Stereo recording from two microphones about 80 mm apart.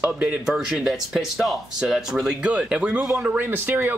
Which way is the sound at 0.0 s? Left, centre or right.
Centre.